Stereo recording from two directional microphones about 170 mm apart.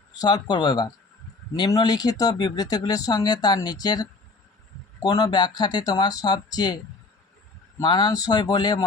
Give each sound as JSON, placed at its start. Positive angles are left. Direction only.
{"t": 0.1, "sound": "speech", "side_deg": 25}
{"t": 7.8, "sound": "speech", "side_deg": 25}